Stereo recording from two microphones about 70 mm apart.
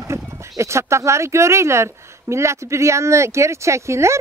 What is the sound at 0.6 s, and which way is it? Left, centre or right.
A woman's voice, right.